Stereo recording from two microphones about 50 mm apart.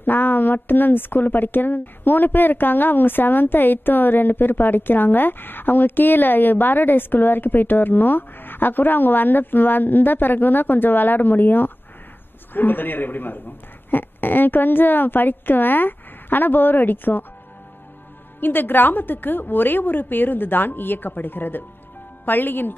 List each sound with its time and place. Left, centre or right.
0.0 s a woman's voice: left
18.4 s a woman's voice: left